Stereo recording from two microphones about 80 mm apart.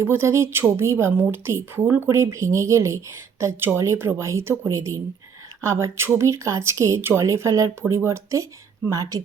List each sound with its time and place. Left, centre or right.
0.0 s speech: right
2.0 s speech: right
8.9 s speech: right